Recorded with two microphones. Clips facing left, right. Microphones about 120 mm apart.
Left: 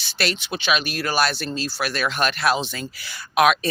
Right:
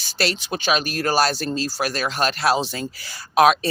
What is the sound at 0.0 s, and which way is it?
Speech, 35° right (ahead or behind).